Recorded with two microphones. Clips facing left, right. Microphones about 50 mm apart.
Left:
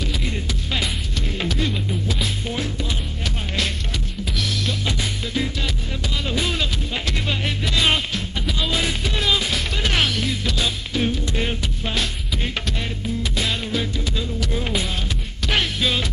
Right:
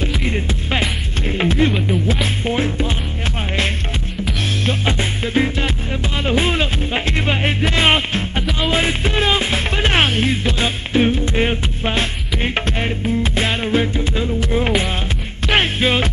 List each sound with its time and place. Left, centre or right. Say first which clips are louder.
0.0 s music: right 6 dB; right
4.4 s music: right 4 dB; right